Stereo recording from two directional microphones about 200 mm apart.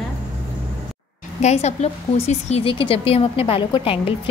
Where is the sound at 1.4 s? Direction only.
35° left (ahead or behind).